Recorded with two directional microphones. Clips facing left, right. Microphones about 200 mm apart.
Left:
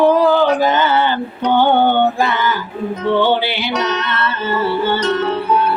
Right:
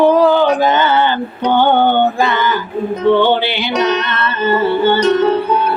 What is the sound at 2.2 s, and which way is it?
Music, 5° left (ahead or behind).